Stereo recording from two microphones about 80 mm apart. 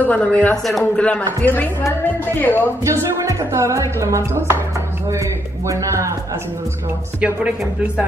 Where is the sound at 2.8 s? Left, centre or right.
Right.